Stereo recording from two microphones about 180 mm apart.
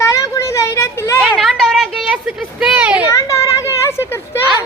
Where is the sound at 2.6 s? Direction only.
5° right (ahead or behind).